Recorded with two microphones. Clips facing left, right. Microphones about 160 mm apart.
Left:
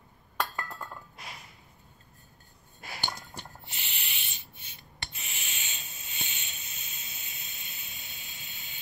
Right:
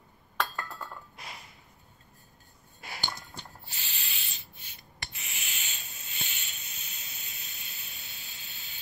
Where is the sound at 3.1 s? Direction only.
20° left (ahead or behind).